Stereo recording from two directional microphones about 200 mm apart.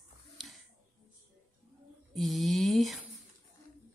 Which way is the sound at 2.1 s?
Centre (ahead or behind).